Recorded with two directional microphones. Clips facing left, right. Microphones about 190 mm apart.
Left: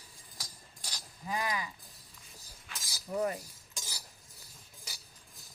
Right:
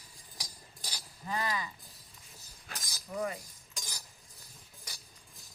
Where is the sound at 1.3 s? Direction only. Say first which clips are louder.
Even; 10° left (ahead or behind).